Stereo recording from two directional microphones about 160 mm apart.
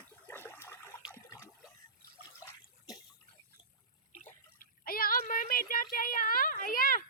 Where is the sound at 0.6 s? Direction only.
15° left (ahead or behind).